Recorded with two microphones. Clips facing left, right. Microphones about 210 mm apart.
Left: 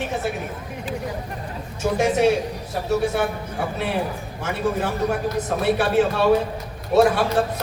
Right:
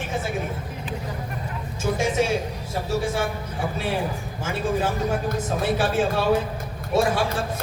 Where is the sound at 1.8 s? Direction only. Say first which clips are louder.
Left 4 dB; 65° left (ahead or behind).